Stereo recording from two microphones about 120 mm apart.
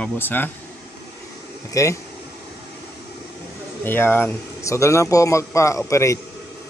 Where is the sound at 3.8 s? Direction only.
20° left (ahead or behind).